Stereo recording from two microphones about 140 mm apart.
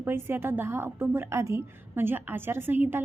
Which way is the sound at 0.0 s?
15° right (ahead or behind).